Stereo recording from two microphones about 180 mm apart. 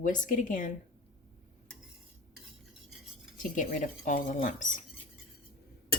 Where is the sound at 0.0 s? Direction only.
45° left (ahead or behind).